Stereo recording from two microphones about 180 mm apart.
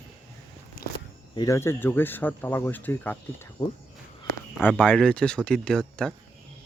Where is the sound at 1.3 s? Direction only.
20° left (ahead or behind).